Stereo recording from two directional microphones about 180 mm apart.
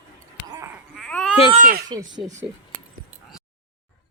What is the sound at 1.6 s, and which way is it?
Speech, 50° right (ahead or behind).